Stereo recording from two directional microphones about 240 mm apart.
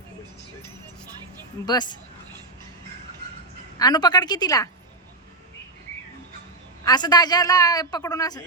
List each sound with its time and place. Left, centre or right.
1.6 s a man's voice: centre
3.8 s a man's voice: centre
6.8 s a man's voice: centre